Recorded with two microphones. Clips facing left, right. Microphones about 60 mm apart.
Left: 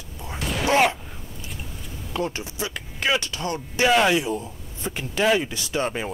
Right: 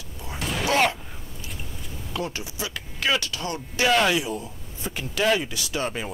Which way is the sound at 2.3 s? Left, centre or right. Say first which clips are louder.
Left 2 dB; left.